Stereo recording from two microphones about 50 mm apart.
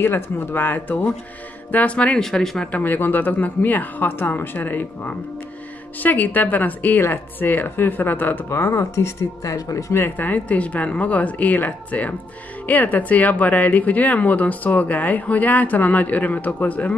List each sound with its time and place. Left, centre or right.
0.0 s speech: left
2.1 s speech: centre
2.7 s speech: left
8.5 s speech: left
9.9 s speech: left